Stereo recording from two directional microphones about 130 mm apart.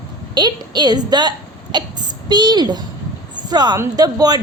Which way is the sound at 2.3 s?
35° right (ahead or behind).